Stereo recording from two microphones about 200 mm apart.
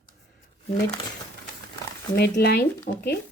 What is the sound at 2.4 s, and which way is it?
Speech, 50° left (ahead or behind).